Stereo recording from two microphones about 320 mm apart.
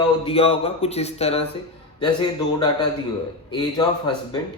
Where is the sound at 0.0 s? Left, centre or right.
Centre.